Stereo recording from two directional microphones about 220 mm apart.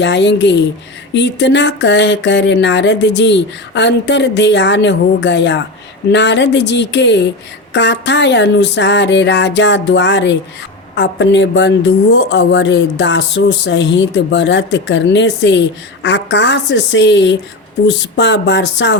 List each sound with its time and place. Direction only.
0.0 s speech: 55° left (ahead or behind)